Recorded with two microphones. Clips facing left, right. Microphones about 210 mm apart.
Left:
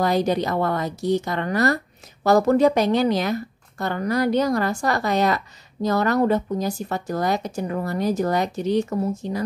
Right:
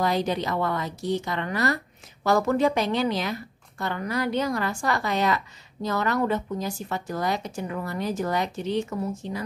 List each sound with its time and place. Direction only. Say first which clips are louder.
0.0 s a woman's voice: left 4 dB; 45° left (ahead or behind)